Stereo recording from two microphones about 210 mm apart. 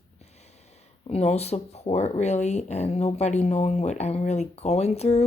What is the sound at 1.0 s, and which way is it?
Speech, 30° left (ahead or behind).